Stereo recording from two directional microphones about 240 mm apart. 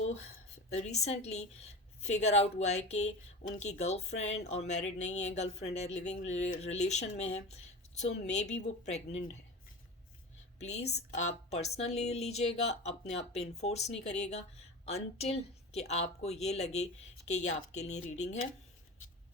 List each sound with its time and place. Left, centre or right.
0.9 s a woman's voice: left
10.6 s a woman's voice: left